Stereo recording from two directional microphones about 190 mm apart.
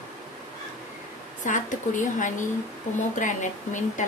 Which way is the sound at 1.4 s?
40° left (ahead or behind).